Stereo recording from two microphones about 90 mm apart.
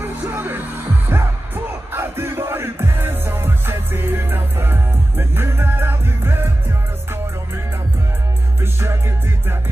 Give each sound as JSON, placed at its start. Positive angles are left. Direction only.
{"t": 0.0, "sound": "music", "side_deg": -25}
{"t": 8.5, "sound": "music", "side_deg": -30}